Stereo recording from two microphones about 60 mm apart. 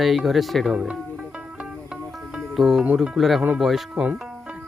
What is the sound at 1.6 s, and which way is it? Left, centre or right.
Music, centre.